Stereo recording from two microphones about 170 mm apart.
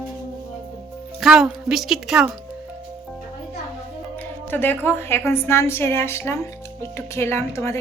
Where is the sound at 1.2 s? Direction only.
Centre (ahead or behind).